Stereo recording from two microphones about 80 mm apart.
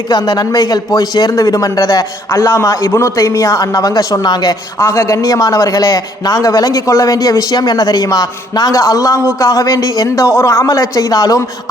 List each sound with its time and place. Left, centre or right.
0.1 s a man's voice: left
4.8 s a man's voice: left